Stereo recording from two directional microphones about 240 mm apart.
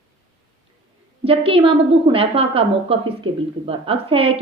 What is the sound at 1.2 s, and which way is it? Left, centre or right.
A woman's voice, right.